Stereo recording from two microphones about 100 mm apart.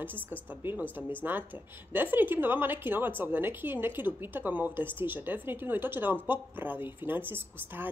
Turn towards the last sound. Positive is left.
turn(degrees=-20)  # may be behind; listen again after turning